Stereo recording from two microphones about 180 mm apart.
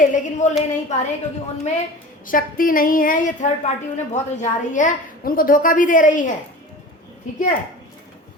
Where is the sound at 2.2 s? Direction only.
50° left (ahead or behind).